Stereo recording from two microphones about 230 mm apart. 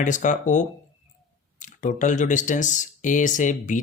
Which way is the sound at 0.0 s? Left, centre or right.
Left.